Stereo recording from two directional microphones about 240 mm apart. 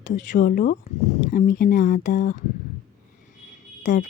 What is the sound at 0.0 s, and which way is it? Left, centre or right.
Speech, left.